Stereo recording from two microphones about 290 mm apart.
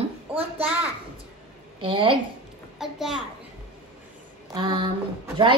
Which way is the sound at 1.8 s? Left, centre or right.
Centre.